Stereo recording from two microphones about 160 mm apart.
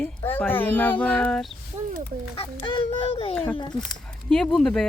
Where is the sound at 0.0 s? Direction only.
10° left (ahead or behind).